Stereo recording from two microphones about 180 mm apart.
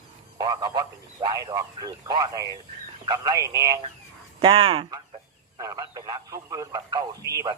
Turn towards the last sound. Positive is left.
turn(degrees=-20)  # may be behind; listen again after turning